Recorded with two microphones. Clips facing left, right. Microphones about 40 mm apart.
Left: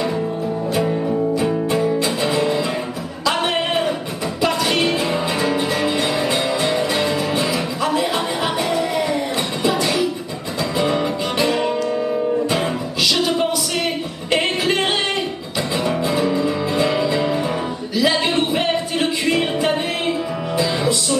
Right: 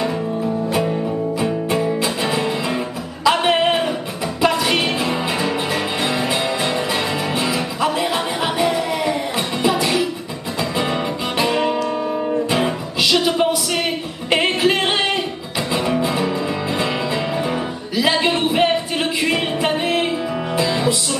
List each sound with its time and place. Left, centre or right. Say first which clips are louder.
0.7 s music: left 1 dB; centre